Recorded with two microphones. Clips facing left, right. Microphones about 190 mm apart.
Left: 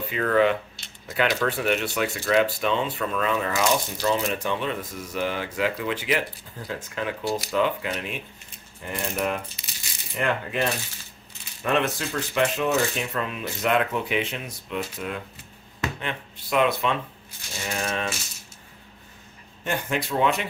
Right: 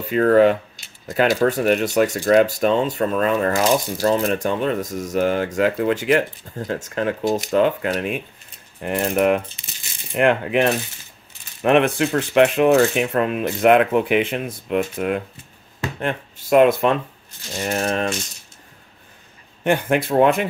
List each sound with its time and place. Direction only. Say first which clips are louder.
0.1 s speech: right 7 dB; 45° right (ahead or behind)
19.6 s speech: right 9 dB; 60° right (ahead or behind)